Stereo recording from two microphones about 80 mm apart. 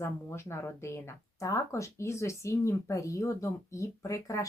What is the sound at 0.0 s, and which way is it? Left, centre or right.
Speech, left.